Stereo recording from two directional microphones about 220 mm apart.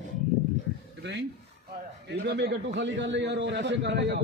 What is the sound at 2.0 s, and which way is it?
A man's voice, 50° right (ahead or behind).